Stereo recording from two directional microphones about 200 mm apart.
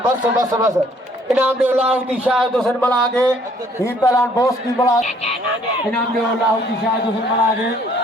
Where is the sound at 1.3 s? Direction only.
10° right (ahead or behind).